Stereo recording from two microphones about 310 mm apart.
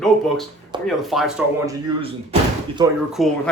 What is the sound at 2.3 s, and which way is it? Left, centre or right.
Door, centre.